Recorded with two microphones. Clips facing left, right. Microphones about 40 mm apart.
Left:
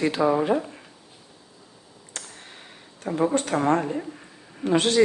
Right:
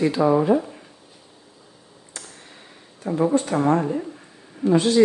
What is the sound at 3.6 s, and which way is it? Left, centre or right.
Speech, left.